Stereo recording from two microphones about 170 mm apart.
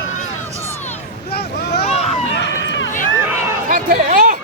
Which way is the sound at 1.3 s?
75° left (ahead or behind).